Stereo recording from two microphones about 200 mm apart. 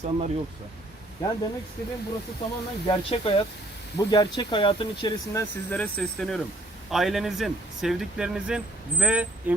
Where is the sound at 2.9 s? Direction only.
30° left (ahead or behind).